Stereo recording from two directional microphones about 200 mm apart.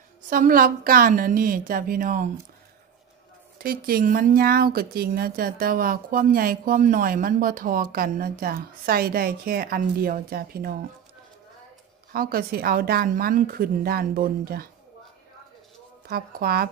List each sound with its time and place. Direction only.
0.3 s speech: 45° right (ahead or behind)
3.5 s speech: 50° right (ahead or behind)
12.1 s speech: 45° right (ahead or behind)
16.1 s speech: 50° right (ahead or behind)